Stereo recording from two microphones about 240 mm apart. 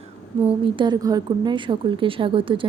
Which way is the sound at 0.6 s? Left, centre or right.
Centre.